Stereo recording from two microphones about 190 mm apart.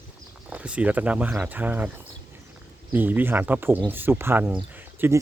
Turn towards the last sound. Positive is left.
turn(degrees=-10)  # may be behind; listen again after turning